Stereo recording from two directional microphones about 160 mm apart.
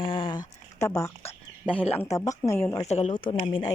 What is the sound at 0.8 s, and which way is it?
Speech, 20° left (ahead or behind).